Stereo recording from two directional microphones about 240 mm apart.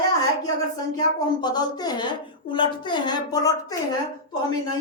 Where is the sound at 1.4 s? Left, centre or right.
Centre.